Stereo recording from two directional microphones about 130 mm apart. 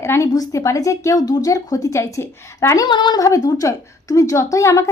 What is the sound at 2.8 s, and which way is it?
A woman's voice, 35° left (ahead or behind).